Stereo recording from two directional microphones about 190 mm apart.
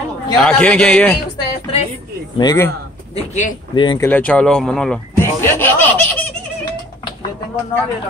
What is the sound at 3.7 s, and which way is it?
Speech, 25° left (ahead or behind).